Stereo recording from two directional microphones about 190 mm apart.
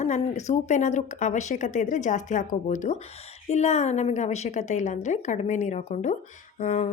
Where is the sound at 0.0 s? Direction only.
40° left (ahead or behind).